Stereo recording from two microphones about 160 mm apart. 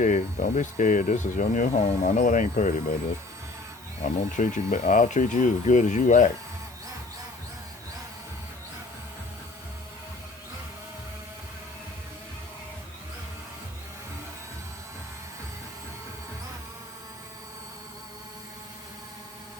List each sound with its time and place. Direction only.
0.0 s speech: 50° left (ahead or behind)
4.0 s speech: 50° left (ahead or behind)